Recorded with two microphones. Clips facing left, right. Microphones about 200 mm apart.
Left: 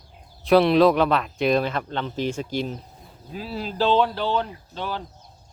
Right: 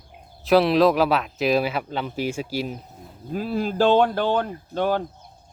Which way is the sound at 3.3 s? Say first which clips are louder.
Right 5 dB; 50° right (ahead or behind).